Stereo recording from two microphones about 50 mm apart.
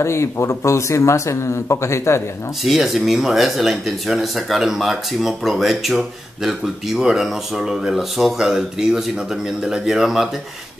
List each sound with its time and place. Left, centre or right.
0.0 s speech: left
2.6 s speech: centre
7.0 s speech: centre